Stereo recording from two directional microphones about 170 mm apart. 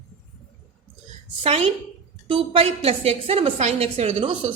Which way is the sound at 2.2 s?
35° right (ahead or behind).